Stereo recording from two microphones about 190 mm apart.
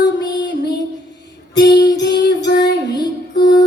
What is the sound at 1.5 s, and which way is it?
Music, 65° left (ahead or behind).